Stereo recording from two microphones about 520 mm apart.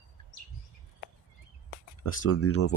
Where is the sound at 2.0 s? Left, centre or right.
Left.